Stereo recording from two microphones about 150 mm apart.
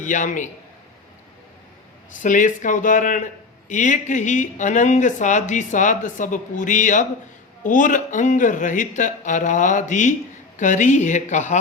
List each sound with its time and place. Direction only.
0.0 s speech: 55° left (ahead or behind)
2.2 s speech: 60° left (ahead or behind)